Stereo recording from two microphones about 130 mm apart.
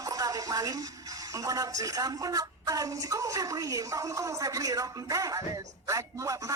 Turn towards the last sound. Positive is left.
turn(degrees=-25)  # may be behind; listen again after turning